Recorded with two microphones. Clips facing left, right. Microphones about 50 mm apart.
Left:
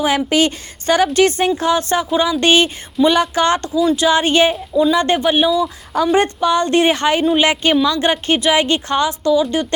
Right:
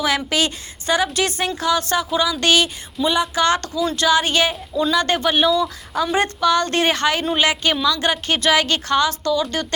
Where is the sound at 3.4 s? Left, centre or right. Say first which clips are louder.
Left 2 dB; left.